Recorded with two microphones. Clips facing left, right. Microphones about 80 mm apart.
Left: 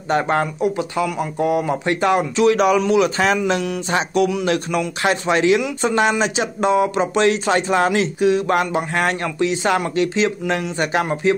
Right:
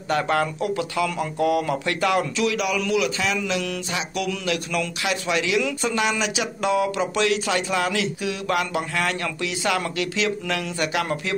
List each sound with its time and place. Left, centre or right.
0.1 s speech: left
4.5 s speech: left